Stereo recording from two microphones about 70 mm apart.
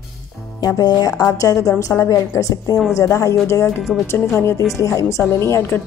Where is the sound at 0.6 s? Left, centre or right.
Left.